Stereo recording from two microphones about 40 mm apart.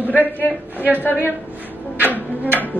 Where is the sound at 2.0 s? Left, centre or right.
Right.